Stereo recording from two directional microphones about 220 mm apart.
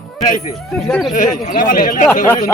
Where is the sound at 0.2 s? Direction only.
35° left (ahead or behind).